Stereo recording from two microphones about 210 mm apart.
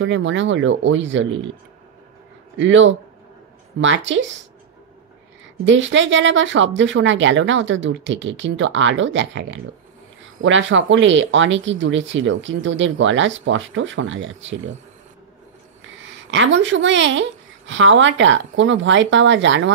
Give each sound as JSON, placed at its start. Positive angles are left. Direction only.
{"t": 0.0, "sound": "speech", "side_deg": -65}
{"t": 2.5, "sound": "speech", "side_deg": -65}
{"t": 5.7, "sound": "speech", "side_deg": -60}
{"t": 16.3, "sound": "speech", "side_deg": -60}